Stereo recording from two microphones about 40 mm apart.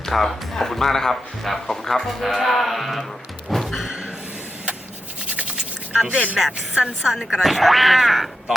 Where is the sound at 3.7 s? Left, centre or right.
Centre.